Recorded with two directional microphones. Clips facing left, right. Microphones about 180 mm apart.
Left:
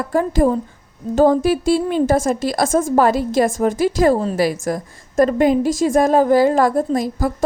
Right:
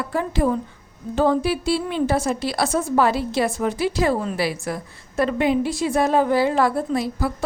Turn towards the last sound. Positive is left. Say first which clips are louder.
# left 4 dB
turn(degrees=45)  # may be behind; listen again after turning